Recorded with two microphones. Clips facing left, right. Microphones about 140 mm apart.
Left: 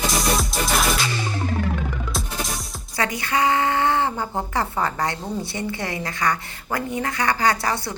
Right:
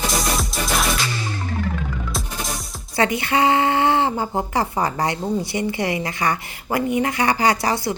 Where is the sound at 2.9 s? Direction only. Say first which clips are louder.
Right 4 dB; 25° right (ahead or behind).